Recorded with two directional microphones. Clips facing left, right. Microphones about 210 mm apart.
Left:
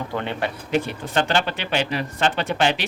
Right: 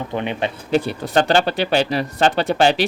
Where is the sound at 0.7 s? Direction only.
35° right (ahead or behind).